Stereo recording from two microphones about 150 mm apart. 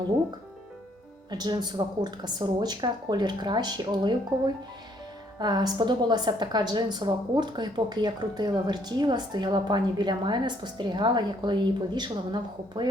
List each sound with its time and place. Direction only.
1.3 s a woman's voice: 25° right (ahead or behind)
5.4 s a woman's voice: 30° right (ahead or behind)